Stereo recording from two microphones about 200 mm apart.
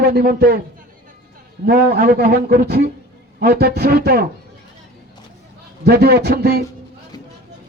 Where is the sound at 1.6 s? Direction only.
45° right (ahead or behind).